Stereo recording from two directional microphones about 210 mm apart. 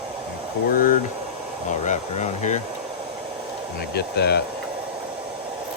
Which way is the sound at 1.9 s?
35° left (ahead or behind).